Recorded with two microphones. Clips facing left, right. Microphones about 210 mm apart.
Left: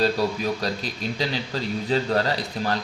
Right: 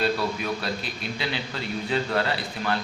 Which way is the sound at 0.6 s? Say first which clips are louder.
Left 3 dB; 40° left (ahead or behind).